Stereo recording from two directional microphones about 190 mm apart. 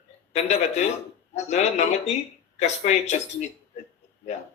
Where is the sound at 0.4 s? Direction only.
35° left (ahead or behind).